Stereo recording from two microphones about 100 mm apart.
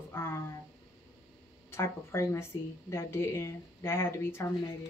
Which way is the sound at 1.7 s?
25° left (ahead or behind).